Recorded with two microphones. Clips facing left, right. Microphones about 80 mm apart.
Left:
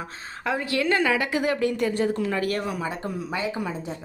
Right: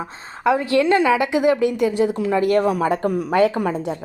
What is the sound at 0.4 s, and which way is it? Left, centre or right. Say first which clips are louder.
Speech: right 8 dB; right.